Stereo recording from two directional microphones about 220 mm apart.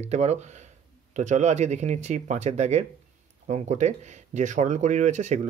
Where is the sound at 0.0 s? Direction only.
30° right (ahead or behind).